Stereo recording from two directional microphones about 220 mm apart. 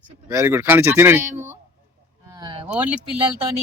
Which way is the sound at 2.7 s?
5° right (ahead or behind).